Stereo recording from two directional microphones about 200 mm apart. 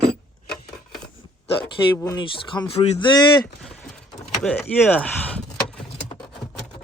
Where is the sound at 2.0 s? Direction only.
20° left (ahead or behind).